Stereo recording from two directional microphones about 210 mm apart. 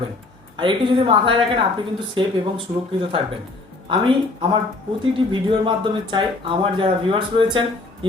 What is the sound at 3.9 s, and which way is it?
Speech, 25° right (ahead or behind).